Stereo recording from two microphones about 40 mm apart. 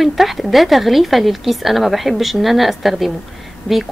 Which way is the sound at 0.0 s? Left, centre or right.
Centre.